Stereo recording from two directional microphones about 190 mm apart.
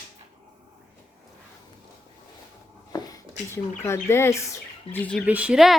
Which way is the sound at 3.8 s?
15° left (ahead or behind).